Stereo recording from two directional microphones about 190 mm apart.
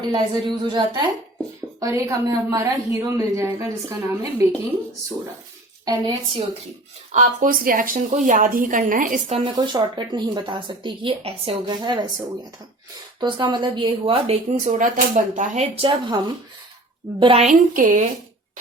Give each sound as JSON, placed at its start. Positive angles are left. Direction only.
{"t": 0.1, "sound": "a woman's voice", "side_deg": -25}
{"t": 5.8, "sound": "speech", "side_deg": -20}
{"t": 7.1, "sound": "a woman's voice", "side_deg": -40}
{"t": 9.4, "sound": "speech", "side_deg": -20}
{"t": 13.1, "sound": "a woman's voice", "side_deg": -25}